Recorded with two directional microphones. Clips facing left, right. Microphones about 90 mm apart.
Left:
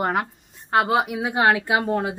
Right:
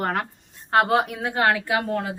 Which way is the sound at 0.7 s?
Centre (ahead or behind).